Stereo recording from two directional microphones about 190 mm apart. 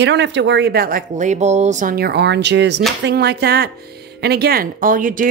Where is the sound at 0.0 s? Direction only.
70° right (ahead or behind).